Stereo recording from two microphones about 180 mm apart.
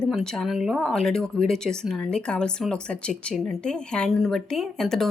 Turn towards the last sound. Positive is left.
turn(degrees=0)  # may be behind; listen again after turning